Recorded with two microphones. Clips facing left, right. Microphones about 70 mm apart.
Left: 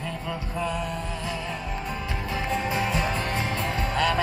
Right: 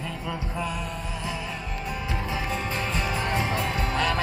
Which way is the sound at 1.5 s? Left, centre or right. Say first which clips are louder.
Left 1 dB; centre.